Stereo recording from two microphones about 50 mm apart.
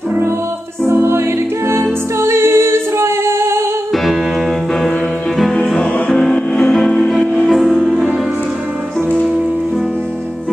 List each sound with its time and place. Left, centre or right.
0.8 s music: right
3.9 s music: centre
5.4 s music: centre